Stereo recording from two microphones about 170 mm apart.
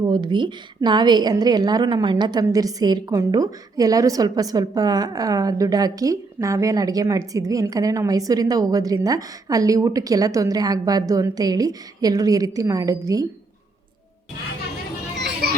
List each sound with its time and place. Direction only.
0.0 s a woman's voice: 25° right (ahead or behind)